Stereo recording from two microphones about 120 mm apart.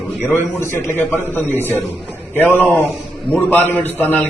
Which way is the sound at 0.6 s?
20° left (ahead or behind).